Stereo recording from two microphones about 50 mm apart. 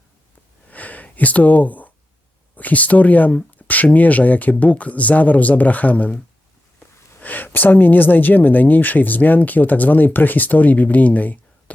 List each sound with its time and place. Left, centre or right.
0.7 s a sound: left
2.6 s speech: left
7.2 s speech: left